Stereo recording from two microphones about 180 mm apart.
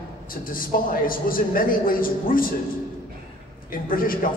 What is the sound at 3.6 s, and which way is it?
Speech, 50° left (ahead or behind).